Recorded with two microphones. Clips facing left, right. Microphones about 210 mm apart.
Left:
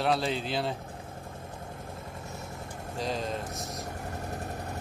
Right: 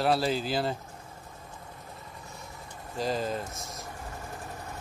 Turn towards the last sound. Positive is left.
turn(degrees=40)  # may be behind; listen again after turning